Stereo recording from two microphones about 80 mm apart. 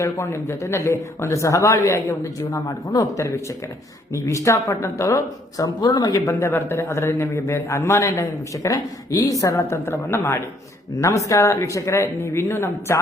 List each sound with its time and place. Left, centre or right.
0.0 s a man's voice: left
4.1 s a man's voice: left
5.6 s a man's voice: left